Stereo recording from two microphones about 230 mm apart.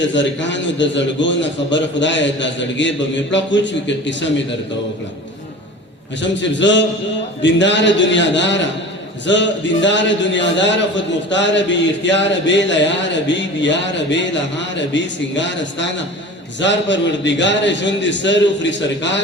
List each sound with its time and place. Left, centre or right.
0.0 s a man's voice: left
6.2 s a man's voice: left